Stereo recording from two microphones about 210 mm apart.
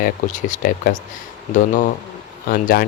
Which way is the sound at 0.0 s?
35° left (ahead or behind).